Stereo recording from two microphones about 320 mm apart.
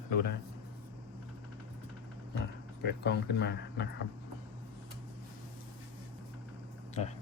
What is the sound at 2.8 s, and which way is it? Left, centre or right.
Speech, left.